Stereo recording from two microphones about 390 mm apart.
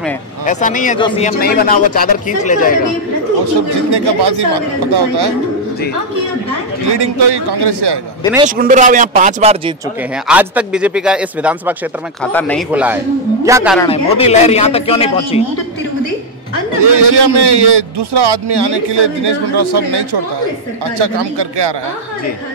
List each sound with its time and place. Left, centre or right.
0.5 s speech: centre
3.9 s a man's voice: right
6.9 s a man's voice: right
8.5 s speech: centre
10.2 s a man's voice: centre
13.7 s a man's voice: centre
16.8 s a man's voice: right
21.0 s a man's voice: right